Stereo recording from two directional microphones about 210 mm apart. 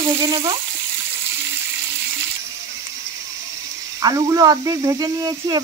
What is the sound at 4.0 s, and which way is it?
Speech, 20° right (ahead or behind).